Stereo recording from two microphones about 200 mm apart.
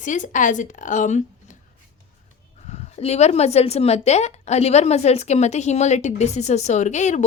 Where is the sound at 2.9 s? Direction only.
30° left (ahead or behind).